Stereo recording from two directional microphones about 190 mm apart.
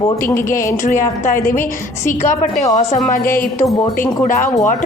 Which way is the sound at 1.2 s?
45° left (ahead or behind).